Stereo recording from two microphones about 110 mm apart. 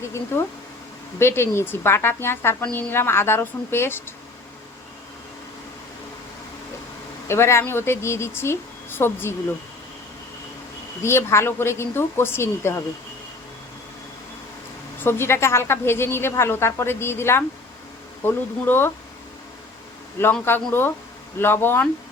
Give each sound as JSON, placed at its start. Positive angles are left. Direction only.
{"t": 0.3, "sound": "a woman's voice", "side_deg": 20}
{"t": 7.3, "sound": "a woman's voice", "side_deg": 25}
{"t": 11.0, "sound": "a woman's voice", "side_deg": 25}
{"t": 15.0, "sound": "a woman's voice", "side_deg": 25}
{"t": 20.2, "sound": "a woman's voice", "side_deg": 20}